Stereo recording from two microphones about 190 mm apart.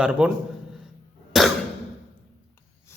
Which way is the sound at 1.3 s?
Centre (ahead or behind).